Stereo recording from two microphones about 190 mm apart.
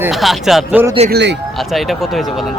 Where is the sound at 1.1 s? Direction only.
60° right (ahead or behind).